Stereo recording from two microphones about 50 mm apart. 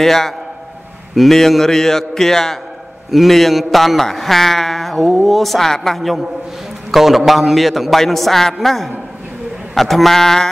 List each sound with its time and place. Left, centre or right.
0.0 s a man's voice: centre